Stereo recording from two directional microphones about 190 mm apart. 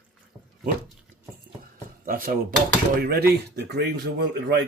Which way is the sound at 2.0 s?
45° right (ahead or behind).